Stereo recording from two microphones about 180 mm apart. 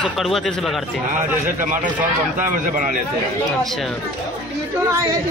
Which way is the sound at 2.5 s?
50° right (ahead or behind).